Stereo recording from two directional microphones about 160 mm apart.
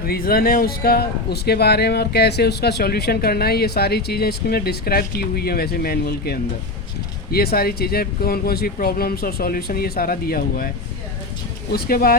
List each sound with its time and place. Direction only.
0.0 s speech: 70° left (ahead or behind)
11.7 s speech: 70° left (ahead or behind)